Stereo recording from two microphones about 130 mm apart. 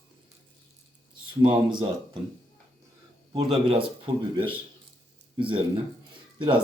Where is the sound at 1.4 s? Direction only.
40° right (ahead or behind).